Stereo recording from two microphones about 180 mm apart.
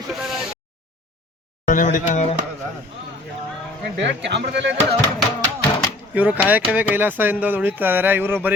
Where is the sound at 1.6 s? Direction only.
45° left (ahead or behind).